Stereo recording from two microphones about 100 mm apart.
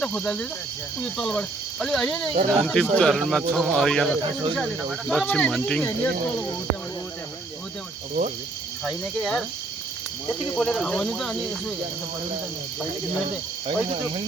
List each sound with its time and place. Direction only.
0.0 s speech: 10° left (ahead or behind)
4.2 s speech: 55° right (ahead or behind)
4.9 s speech: centre (ahead or behind)
5.2 s speech: 15° left (ahead or behind)
5.5 s speech: 5° left (ahead or behind)
5.8 s speech: 20° left (ahead or behind)
8.8 s speech: 5° left (ahead or behind)
10.6 s speech: 5° left (ahead or behind)
13.7 s speech: 65° right (ahead or behind)